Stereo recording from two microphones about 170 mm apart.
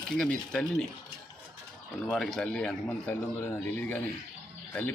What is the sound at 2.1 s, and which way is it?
Speech, 5° left (ahead or behind).